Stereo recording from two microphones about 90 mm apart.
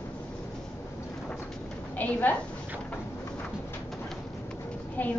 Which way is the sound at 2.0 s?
20° left (ahead or behind).